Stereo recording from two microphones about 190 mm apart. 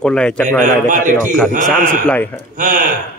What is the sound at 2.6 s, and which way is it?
Speech, 45° right (ahead or behind).